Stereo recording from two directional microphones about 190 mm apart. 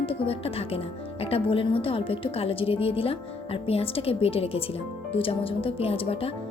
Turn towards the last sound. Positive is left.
turn(degrees=30)  # may be behind; listen again after turning